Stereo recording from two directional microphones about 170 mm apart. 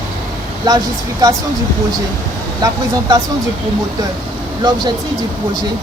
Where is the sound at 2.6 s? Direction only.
20° right (ahead or behind).